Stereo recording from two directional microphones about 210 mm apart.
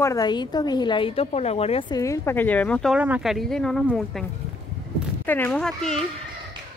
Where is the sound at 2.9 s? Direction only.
5° right (ahead or behind).